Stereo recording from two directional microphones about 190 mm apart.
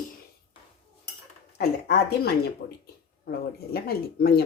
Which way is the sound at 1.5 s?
55° left (ahead or behind).